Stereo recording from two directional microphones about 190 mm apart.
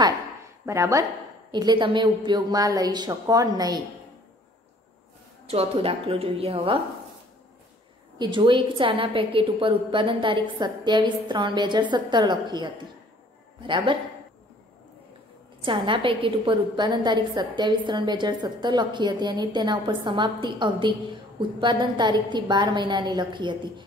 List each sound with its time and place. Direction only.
0.7 s a woman's voice: 15° right (ahead or behind)
5.5 s a woman's voice: 30° right (ahead or behind)
8.2 s a woman's voice: 25° right (ahead or behind)
15.6 s a woman's voice: 25° right (ahead or behind)